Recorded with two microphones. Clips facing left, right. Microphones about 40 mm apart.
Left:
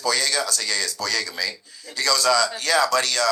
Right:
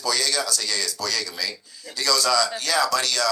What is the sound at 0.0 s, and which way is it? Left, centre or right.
Speech, left.